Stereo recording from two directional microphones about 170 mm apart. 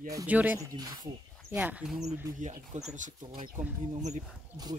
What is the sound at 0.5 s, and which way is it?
Speech, 20° right (ahead or behind).